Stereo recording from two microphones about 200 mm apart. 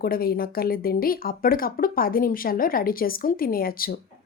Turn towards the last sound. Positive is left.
turn(degrees=45)  # may be behind; listen again after turning